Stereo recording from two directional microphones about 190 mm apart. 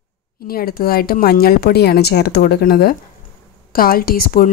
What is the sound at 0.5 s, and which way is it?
Speech, 50° left (ahead or behind).